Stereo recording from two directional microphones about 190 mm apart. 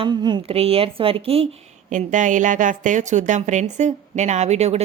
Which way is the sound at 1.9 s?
40° right (ahead or behind).